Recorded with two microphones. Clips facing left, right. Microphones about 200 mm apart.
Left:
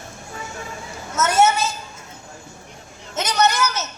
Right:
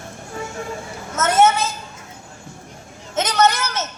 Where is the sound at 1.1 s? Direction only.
50° right (ahead or behind).